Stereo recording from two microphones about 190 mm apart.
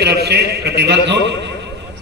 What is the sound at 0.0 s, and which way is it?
A man's voice, 60° right (ahead or behind).